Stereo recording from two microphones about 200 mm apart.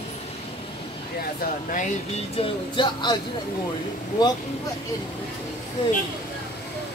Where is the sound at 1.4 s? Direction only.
40° left (ahead or behind).